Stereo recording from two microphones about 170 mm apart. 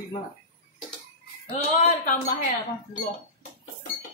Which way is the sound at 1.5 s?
50° left (ahead or behind).